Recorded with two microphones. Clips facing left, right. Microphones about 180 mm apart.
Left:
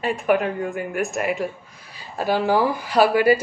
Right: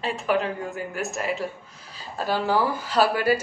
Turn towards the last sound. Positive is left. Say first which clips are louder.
# left 5 dB
turn(degrees=10)  # may be behind; listen again after turning